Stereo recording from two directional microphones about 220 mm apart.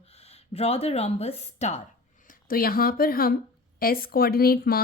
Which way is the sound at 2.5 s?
40° left (ahead or behind).